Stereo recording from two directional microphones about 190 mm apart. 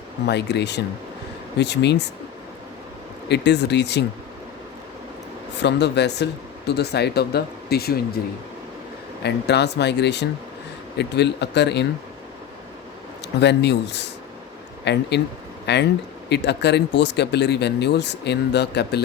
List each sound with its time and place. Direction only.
0.3 s speech: 65° left (ahead or behind)
3.2 s speech: 65° left (ahead or behind)
5.5 s speech: 65° left (ahead or behind)
9.2 s speech: 60° left (ahead or behind)
13.4 s speech: 65° left (ahead or behind)